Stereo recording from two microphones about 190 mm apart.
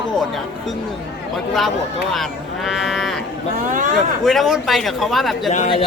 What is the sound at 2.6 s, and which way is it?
Livestock, centre (ahead or behind).